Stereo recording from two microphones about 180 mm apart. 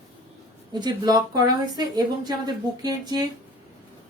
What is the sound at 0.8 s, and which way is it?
A woman's voice, 25° right (ahead or behind).